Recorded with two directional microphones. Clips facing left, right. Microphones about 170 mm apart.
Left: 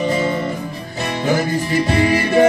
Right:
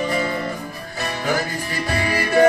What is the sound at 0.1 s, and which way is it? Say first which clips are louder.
Music: left 4 dB; 25° left (ahead or behind).